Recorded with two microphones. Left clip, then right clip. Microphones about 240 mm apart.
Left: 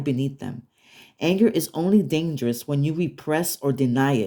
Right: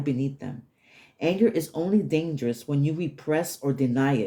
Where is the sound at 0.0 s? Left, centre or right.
Left.